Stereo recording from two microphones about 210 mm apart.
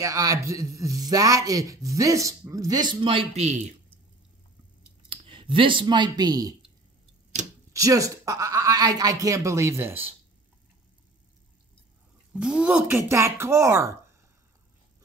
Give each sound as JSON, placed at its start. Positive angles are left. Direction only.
{"t": 0.0, "sound": "speech", "side_deg": -15}
{"t": 5.1, "sound": "speech", "side_deg": -25}
{"t": 7.7, "sound": "speech", "side_deg": -15}
{"t": 12.4, "sound": "speech", "side_deg": -5}